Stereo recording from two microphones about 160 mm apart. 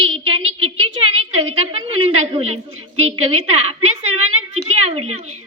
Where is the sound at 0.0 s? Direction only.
35° right (ahead or behind).